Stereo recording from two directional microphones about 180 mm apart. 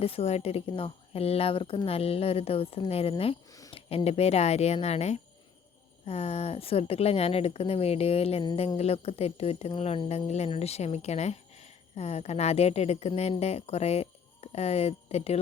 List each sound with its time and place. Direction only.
0.0 s a woman's voice: 35° left (ahead or behind)
3.5 s a sound: 20° left (ahead or behind)
3.8 s a woman's voice: 35° left (ahead or behind)